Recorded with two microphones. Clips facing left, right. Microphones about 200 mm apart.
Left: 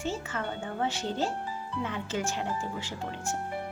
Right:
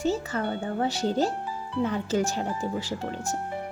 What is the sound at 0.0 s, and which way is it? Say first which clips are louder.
Speech: right 7 dB; 40° right (ahead or behind).